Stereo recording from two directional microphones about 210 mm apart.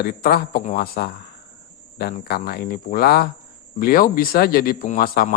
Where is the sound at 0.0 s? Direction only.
45° left (ahead or behind).